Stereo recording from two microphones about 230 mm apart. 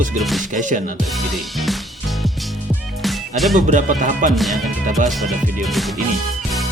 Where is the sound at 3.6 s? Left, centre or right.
Right.